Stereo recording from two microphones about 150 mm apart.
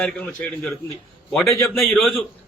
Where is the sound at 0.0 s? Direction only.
5° left (ahead or behind).